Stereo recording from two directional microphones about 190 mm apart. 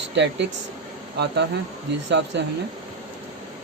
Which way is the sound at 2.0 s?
70° right (ahead or behind).